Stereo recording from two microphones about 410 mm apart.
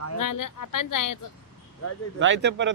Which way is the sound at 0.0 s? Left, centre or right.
Left.